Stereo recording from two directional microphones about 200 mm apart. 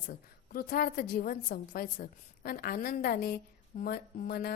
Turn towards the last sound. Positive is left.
turn(degrees=50)  # may be behind; listen again after turning